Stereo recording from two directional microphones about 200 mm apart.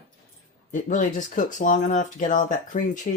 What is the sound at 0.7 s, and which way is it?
Speech, 40° left (ahead or behind).